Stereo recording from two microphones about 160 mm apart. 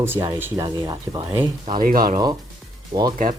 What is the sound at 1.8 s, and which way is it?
Speech, 60° right (ahead or behind).